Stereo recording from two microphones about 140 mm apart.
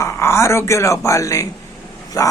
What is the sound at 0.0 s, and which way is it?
A man's voice, 20° left (ahead or behind).